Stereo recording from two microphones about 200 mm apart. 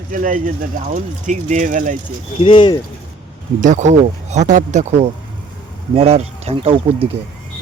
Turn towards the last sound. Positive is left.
turn(degrees=-25)  # may be behind; listen again after turning